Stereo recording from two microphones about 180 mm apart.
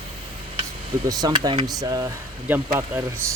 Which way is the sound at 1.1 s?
20° right (ahead or behind).